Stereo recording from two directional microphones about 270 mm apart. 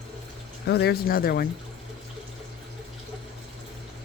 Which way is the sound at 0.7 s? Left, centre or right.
Left.